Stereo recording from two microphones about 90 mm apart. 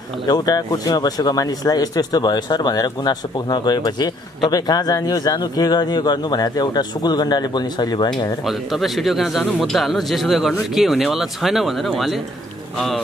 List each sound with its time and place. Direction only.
0.3 s speech: 45° left (ahead or behind)
8.5 s speech: centre (ahead or behind)